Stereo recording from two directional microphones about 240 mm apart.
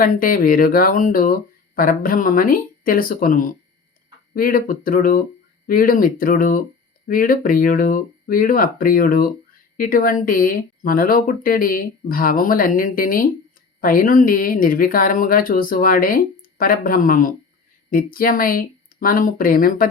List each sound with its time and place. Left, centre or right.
0.0 s speech: left